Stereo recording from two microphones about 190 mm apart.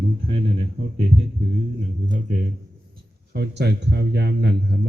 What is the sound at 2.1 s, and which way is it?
Speech, 40° right (ahead or behind).